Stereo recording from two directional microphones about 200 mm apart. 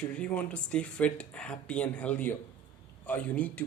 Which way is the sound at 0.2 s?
5° left (ahead or behind).